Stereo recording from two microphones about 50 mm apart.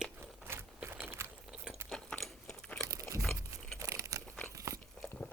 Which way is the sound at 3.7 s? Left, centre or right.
Right.